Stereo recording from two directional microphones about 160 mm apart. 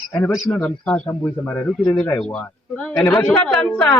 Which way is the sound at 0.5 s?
10° left (ahead or behind).